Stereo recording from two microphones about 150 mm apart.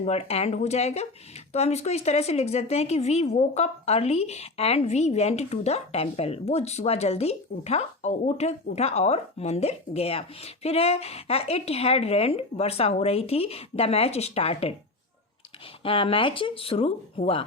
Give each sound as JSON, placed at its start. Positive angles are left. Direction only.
{"t": 0.0, "sound": "a woman's voice", "side_deg": 45}
{"t": 15.8, "sound": "speech", "side_deg": 40}